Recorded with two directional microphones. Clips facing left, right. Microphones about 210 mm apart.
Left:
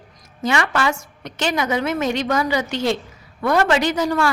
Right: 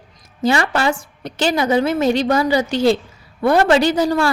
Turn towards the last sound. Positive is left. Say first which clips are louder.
# right 3 dB
turn(degrees=-30)  # may be behind; listen again after turning